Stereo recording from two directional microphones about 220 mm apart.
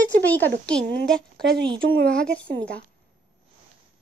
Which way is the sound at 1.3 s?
50° right (ahead or behind).